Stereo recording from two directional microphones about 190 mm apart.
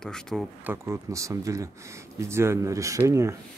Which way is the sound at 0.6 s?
15° right (ahead or behind).